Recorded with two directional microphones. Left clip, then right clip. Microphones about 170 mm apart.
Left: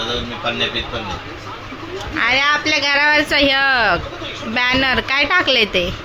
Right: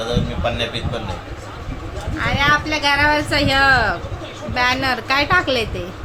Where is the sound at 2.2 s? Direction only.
30° left (ahead or behind).